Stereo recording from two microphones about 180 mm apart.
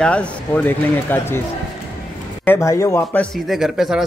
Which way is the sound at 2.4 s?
15° left (ahead or behind).